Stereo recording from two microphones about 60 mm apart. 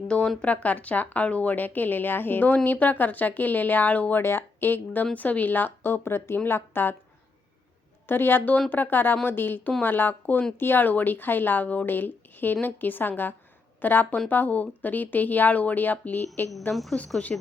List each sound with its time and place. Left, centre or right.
0.1 s speech: centre
4.2 s a woman's voice: left
8.0 s a woman's voice: left
16.7 s speech: centre